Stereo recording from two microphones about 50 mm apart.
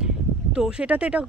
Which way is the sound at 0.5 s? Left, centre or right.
Centre.